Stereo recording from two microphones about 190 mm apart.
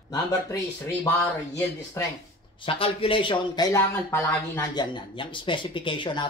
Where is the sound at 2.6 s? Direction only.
30° left (ahead or behind).